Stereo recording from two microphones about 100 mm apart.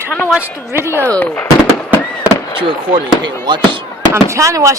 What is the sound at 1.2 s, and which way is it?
Speech, 15° left (ahead or behind).